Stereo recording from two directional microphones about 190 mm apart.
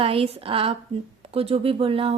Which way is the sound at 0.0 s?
30° right (ahead or behind).